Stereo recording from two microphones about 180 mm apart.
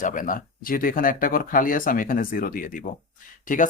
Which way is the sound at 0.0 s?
45° left (ahead or behind).